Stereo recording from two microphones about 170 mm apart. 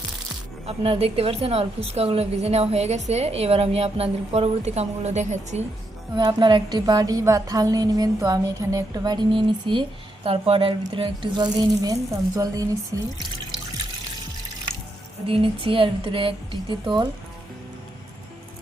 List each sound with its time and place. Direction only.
0.6 s a woman's voice: 35° right (ahead or behind)
6.1 s a woman's voice: 25° right (ahead or behind)
15.3 s a woman's voice: 30° right (ahead or behind)